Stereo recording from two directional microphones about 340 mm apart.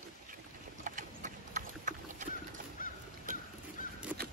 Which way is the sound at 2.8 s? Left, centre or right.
Left.